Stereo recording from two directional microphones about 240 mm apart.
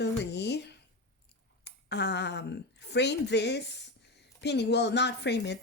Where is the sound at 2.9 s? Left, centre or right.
Left.